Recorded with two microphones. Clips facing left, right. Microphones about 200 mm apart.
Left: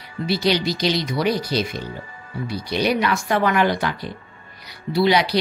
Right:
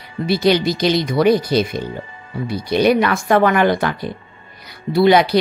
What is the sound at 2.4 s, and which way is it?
Speech, 50° right (ahead or behind).